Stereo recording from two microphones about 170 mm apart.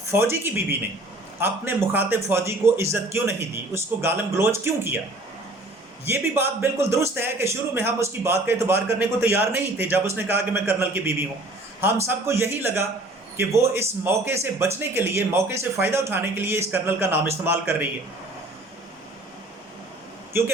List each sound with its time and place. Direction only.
0.1 s a man's voice: 15° right (ahead or behind)
6.1 s a man's voice: 15° right (ahead or behind)